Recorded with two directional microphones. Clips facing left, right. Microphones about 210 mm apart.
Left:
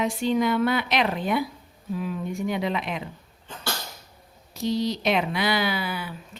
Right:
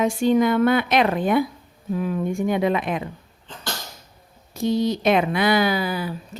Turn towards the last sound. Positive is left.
turn(degrees=-40)  # may be behind; listen again after turning